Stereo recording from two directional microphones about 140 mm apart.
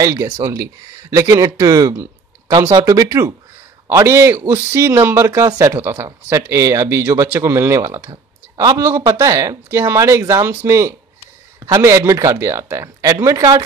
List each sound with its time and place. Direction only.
0.0 s speech: 25° right (ahead or behind)
2.7 s a man's voice: 25° right (ahead or behind)